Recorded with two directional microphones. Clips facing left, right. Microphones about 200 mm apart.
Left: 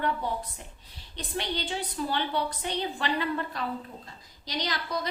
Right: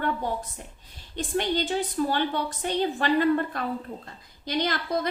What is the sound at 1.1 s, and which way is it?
A woman's voice, 50° right (ahead or behind).